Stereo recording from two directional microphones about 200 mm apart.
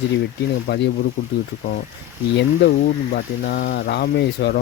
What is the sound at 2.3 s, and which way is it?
Speech, 55° left (ahead or behind).